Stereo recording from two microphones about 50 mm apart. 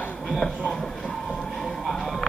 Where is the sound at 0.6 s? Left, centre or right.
Centre.